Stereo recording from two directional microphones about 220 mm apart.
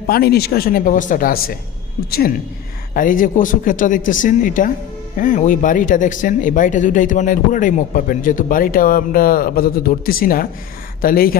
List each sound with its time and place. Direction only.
0.0 s speech: 45° left (ahead or behind)